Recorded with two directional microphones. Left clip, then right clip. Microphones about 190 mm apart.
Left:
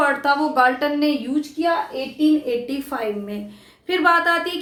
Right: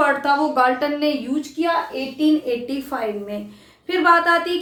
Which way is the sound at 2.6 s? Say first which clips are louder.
Even; 25° left (ahead or behind).